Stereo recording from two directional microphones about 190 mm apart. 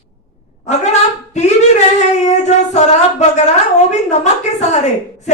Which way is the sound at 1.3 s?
40° left (ahead or behind).